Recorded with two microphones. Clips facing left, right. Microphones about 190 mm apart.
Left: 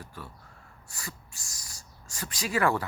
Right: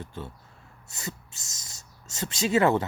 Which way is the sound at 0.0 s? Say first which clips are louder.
Right 6 dB; 25° right (ahead or behind).